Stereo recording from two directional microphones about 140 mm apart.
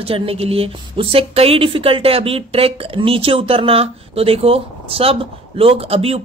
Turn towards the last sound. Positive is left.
turn(degrees=-45)  # may be behind; listen again after turning